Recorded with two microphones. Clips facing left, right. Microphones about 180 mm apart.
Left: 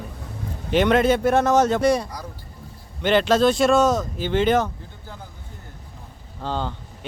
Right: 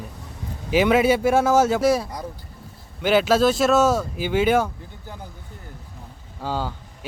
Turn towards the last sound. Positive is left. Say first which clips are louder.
# even
turn(degrees=-5)  # may be behind; listen again after turning